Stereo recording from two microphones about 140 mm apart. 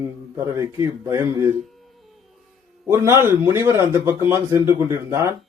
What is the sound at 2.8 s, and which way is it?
A man's voice, 20° right (ahead or behind).